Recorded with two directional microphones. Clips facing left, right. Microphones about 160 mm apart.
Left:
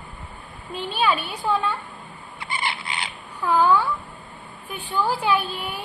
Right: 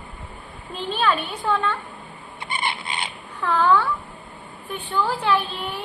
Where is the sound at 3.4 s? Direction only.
10° left (ahead or behind).